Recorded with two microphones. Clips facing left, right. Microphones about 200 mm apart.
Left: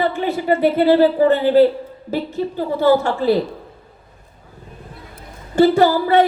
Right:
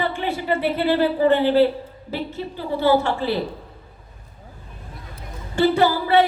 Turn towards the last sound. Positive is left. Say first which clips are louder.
# left 3 dB
turn(degrees=45)  # may be behind; listen again after turning